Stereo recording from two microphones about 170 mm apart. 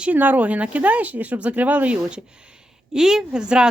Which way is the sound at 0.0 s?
10° right (ahead or behind).